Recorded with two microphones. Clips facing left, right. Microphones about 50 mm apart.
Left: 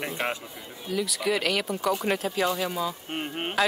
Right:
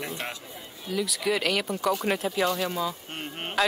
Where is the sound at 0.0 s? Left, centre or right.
Left.